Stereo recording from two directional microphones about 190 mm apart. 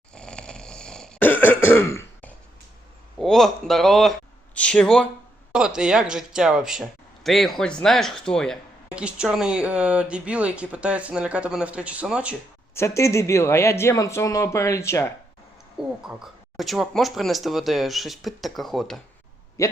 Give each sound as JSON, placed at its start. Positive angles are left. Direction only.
{"t": 0.1, "sound": "cough", "side_deg": 5}
{"t": 3.2, "sound": "speech", "side_deg": 0}
{"t": 12.7, "sound": "speech", "side_deg": 15}
{"t": 16.0, "sound": "speech", "side_deg": 0}
{"t": 19.6, "sound": "speech", "side_deg": 15}